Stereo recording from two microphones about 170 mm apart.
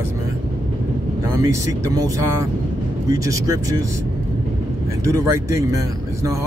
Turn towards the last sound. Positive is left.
turn(degrees=-15)  # may be behind; listen again after turning